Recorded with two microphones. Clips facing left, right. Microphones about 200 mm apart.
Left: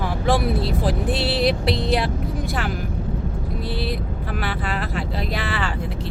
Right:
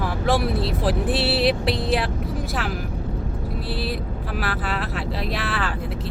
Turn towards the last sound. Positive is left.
turn(degrees=0)  # may be behind; listen again after turning